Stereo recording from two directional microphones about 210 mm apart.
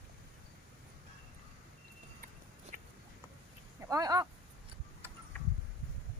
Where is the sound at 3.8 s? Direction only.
15° right (ahead or behind).